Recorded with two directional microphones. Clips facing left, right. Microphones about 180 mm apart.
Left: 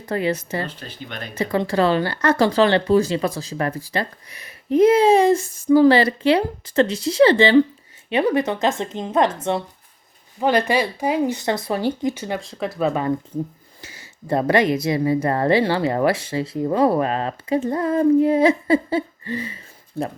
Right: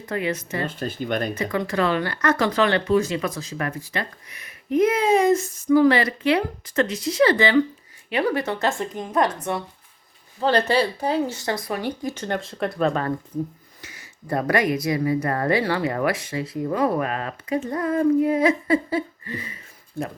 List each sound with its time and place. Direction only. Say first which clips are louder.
0.0 s speech: left 4 dB; 35° left (ahead or behind)
0.8 s speech: right 9 dB; 50° right (ahead or behind)
1.4 s speech: left 4 dB; 30° left (ahead or behind)
10.4 s speech: left 1 dB; 10° left (ahead or behind); by 11.9 s 30° left (ahead or behind)
12.0 s speech: left 3 dB; 10° left (ahead or behind)
13.8 s speech: left 4 dB; 30° left (ahead or behind)